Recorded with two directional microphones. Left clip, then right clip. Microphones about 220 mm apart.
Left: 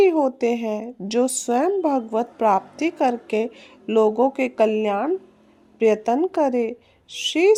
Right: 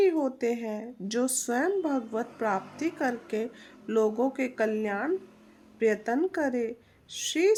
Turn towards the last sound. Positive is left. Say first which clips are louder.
# left 8 dB
turn(degrees=25)  # may be behind; listen again after turning